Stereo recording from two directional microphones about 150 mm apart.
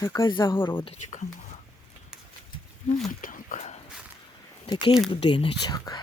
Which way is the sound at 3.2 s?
60° left (ahead or behind).